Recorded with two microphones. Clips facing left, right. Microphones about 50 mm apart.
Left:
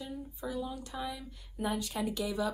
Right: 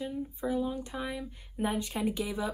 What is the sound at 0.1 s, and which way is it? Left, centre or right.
Speech, right.